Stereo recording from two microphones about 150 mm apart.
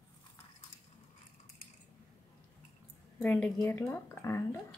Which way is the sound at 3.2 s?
10° left (ahead or behind).